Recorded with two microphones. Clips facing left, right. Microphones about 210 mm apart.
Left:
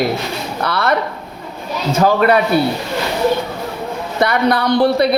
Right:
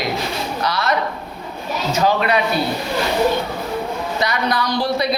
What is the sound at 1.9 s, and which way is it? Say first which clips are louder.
Speech: left 5 dB; 50° left (ahead or behind).